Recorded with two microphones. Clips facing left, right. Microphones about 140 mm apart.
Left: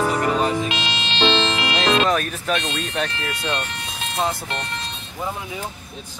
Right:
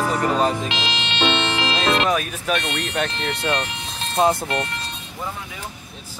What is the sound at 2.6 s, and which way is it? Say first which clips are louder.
Speech: right 1 dB; 70° right (ahead or behind).